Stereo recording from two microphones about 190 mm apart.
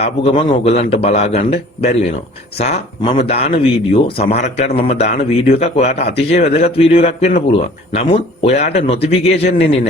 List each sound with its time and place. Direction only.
0.0 s speech: 30° left (ahead or behind)